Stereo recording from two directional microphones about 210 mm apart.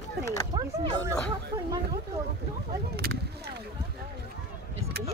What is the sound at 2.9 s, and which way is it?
Speech, 50° right (ahead or behind).